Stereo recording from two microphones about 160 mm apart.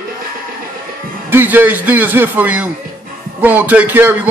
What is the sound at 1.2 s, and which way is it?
Speech, 15° right (ahead or behind).